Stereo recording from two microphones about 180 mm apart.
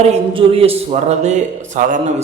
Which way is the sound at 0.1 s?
30° right (ahead or behind).